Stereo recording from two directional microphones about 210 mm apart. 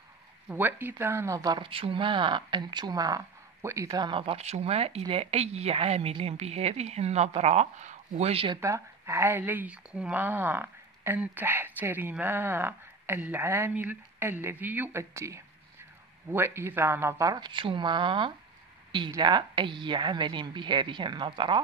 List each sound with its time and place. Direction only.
0.5 s speech: 10° right (ahead or behind); by 8.5 s 25° right (ahead or behind)
8.5 s speech: 15° right (ahead or behind)